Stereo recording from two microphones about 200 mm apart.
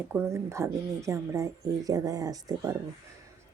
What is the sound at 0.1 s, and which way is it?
Speech, 10° right (ahead or behind).